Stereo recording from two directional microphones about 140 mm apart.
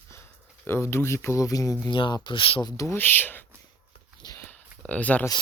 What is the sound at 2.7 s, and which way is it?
Speech, 20° left (ahead or behind).